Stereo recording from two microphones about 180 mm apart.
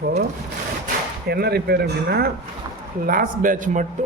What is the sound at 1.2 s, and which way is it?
Speech, 60° right (ahead or behind).